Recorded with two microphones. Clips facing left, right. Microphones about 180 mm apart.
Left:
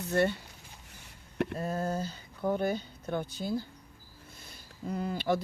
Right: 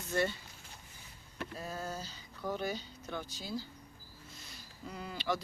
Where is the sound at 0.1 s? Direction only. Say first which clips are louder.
Left 5 dB; 60° left (ahead or behind).